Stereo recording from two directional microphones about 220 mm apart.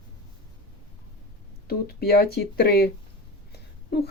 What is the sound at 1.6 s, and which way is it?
Speech, 45° left (ahead or behind).